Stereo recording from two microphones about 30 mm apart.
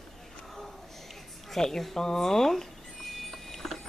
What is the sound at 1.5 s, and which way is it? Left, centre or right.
Speech, centre.